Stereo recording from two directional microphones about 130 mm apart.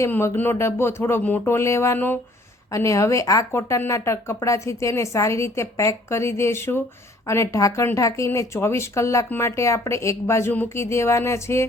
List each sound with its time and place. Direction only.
0.0 s speech: 20° left (ahead or behind)